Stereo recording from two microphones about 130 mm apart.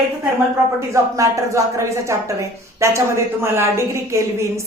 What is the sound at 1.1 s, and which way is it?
A woman's voice, 25° right (ahead or behind).